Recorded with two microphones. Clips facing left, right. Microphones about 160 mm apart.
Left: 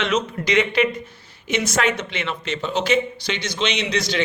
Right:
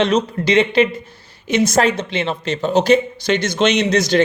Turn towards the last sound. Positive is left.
turn(degrees=-45)  # may be behind; listen again after turning